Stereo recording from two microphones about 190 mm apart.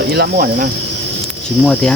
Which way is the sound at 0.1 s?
55° right (ahead or behind).